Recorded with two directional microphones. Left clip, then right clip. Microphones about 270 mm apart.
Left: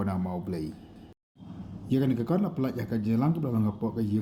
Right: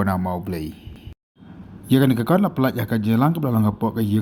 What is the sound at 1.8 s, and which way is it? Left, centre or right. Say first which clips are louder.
Speech: right 9 dB; right.